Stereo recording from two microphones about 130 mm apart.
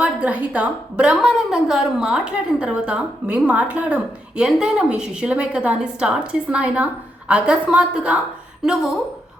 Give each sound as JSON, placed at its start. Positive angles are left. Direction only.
{"t": 0.0, "sound": "a woman's voice", "side_deg": -10}